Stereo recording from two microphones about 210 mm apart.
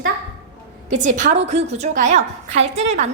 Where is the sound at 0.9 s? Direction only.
35° right (ahead or behind).